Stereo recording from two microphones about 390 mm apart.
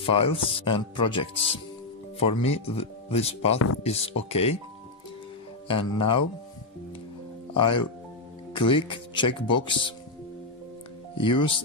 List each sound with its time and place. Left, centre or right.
0.1 s speech: centre
3.5 s speech: left
3.8 s speech: centre
5.7 s speech: centre
7.5 s speech: centre
11.1 s speech: centre